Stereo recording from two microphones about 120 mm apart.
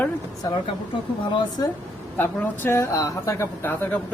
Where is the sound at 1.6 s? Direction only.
35° left (ahead or behind).